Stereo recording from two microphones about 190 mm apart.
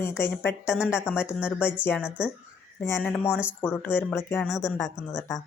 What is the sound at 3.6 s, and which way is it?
Speech, 10° left (ahead or behind).